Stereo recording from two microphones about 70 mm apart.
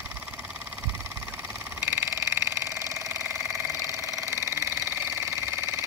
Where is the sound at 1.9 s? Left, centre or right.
Right.